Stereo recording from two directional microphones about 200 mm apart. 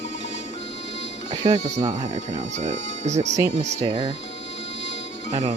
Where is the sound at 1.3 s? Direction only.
25° right (ahead or behind).